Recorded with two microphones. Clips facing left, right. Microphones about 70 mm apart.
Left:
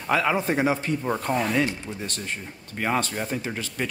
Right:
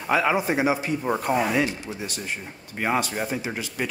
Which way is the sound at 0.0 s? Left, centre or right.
Centre.